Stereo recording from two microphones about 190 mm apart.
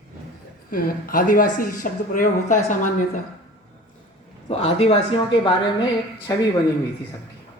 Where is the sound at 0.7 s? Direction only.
50° left (ahead or behind).